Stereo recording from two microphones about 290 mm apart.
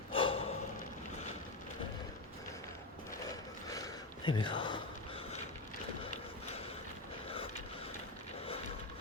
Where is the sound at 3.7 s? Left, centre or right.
Centre.